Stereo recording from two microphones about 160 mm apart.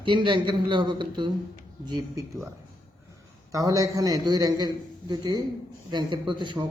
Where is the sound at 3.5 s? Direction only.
20° right (ahead or behind).